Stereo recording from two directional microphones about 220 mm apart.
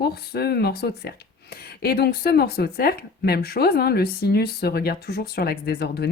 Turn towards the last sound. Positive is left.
turn(degrees=45)  # may be behind; listen again after turning